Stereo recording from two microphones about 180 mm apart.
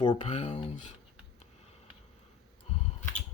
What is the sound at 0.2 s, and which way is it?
Speech, 40° left (ahead or behind).